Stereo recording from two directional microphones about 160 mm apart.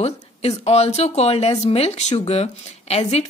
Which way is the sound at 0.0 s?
40° left (ahead or behind).